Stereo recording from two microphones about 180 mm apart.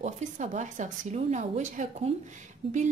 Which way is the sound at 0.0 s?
40° right (ahead or behind).